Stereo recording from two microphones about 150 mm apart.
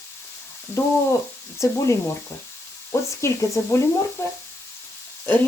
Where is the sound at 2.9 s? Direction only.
20° left (ahead or behind).